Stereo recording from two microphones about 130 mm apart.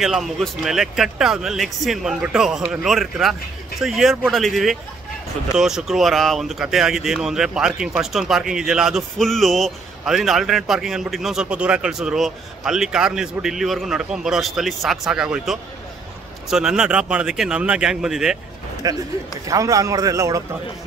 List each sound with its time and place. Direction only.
0.0 s speech: centre (ahead or behind)
18.8 s a man's voice: 25° right (ahead or behind)